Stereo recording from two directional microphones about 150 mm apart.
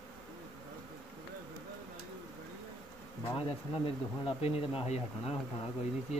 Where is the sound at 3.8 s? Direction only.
40° left (ahead or behind).